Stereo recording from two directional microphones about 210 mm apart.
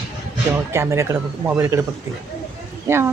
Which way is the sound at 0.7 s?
15° right (ahead or behind).